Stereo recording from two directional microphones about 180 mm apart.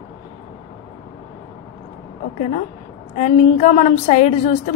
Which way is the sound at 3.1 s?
40° left (ahead or behind).